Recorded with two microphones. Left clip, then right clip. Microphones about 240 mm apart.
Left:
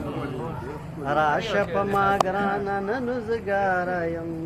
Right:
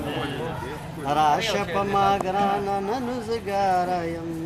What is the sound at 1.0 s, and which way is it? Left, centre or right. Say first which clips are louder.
Music: right 2 dB; centre.